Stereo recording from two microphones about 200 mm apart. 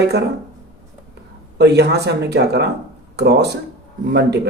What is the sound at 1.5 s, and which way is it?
Speech, 55° right (ahead or behind).